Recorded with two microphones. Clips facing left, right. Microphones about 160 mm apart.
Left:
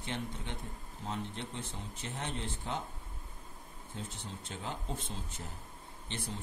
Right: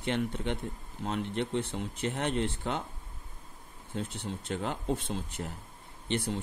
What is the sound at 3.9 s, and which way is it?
Speech, 70° right (ahead or behind).